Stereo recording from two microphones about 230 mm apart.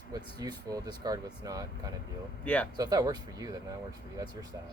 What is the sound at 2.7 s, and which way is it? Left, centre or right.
Speech, centre.